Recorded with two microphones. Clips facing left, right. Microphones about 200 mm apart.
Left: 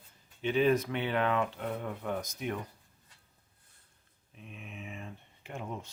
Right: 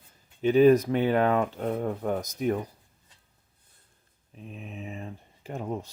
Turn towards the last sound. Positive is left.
turn(degrees=-40)  # may be behind; listen again after turning